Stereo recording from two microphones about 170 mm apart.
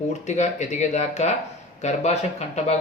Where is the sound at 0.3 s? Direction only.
45° left (ahead or behind).